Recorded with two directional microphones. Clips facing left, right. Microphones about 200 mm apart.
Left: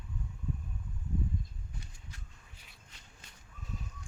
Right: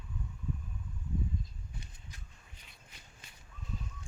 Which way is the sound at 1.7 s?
20° right (ahead or behind).